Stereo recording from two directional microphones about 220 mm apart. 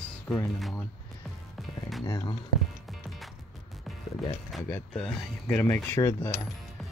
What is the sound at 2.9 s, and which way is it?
Music, centre (ahead or behind).